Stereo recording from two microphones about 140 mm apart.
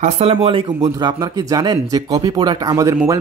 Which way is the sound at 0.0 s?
45° right (ahead or behind).